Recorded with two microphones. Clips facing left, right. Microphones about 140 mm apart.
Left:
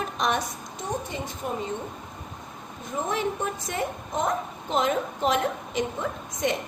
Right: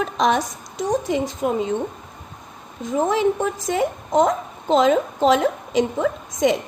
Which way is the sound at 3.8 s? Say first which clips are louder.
Right 10 dB; 90° right.